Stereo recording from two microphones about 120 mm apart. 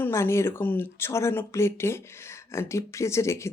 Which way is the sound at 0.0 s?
20° left (ahead or behind).